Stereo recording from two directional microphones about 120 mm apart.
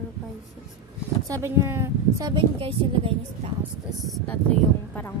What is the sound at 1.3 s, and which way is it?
Speech, 20° right (ahead or behind).